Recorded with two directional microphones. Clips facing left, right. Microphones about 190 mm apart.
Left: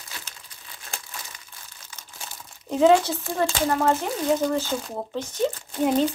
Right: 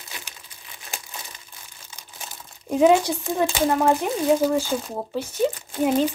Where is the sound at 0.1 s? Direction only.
15° right (ahead or behind).